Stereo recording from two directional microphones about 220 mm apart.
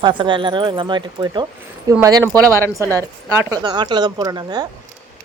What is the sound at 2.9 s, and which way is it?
Speech, 15° right (ahead or behind).